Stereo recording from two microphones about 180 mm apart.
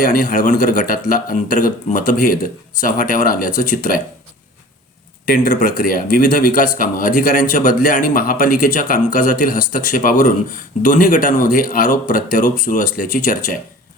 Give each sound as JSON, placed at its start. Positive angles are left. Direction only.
{"t": 0.0, "sound": "speech", "side_deg": 50}
{"t": 5.2, "sound": "speech", "side_deg": 45}